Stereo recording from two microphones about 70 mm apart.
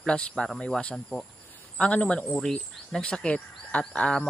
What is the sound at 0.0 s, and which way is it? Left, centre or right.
Speech, centre.